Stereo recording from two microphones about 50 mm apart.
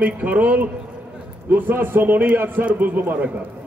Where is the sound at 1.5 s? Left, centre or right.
Right.